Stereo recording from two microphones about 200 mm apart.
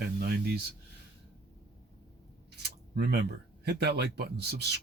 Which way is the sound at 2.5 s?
55° right (ahead or behind).